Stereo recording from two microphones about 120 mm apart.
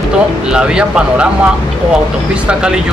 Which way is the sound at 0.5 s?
5° right (ahead or behind).